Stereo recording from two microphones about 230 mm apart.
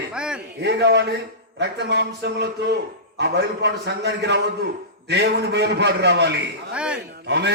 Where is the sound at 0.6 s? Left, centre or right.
Right.